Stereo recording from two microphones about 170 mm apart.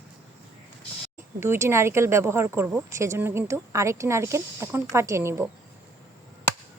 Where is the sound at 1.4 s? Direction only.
15° right (ahead or behind).